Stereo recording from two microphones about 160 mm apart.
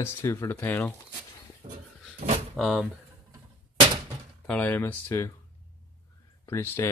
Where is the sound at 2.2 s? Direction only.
50° right (ahead or behind).